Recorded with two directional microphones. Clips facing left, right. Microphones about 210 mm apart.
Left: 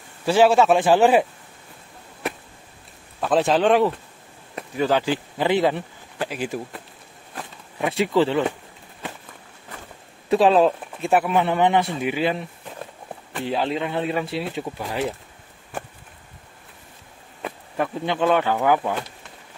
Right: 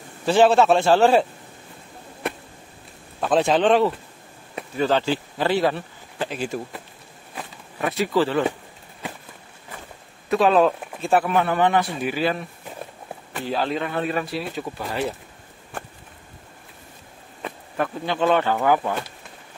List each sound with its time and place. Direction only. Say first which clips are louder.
0.2 s a man's voice: even; 10° left (ahead or behind)
3.2 s speech: even; centre (ahead or behind)
7.9 s a man's voice: left 2 dB; 25° left (ahead or behind)
10.3 s a man's voice: left 1 dB; 30° left (ahead or behind)
13.5 s a man's voice: left 1 dB; 20° left (ahead or behind)
14.6 s a man's voice: even; 10° left (ahead or behind)
17.4 s a sound: even; 5° left (ahead or behind)
18.0 s a man's voice: even; 10° left (ahead or behind)